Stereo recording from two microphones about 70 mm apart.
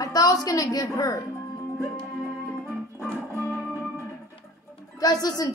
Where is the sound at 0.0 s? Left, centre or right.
Left.